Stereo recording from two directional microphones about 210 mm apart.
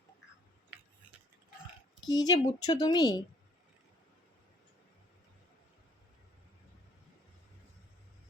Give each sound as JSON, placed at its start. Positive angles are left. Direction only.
{"t": 2.0, "sound": "speech", "side_deg": 20}